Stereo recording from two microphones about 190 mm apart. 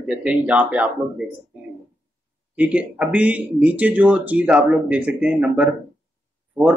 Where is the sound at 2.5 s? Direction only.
5° right (ahead or behind).